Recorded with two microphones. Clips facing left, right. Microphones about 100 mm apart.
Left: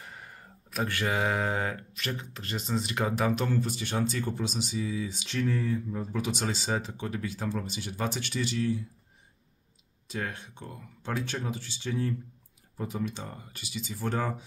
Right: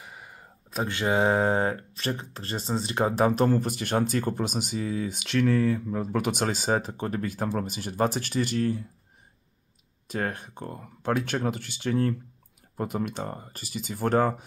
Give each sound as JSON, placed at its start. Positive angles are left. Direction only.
{"t": 0.0, "sound": "a sound", "side_deg": -15}
{"t": 0.7, "sound": "speech", "side_deg": -25}
{"t": 10.0, "sound": "speech", "side_deg": -50}